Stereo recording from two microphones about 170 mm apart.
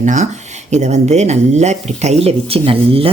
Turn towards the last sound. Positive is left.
turn(degrees=-35)  # may be behind; listen again after turning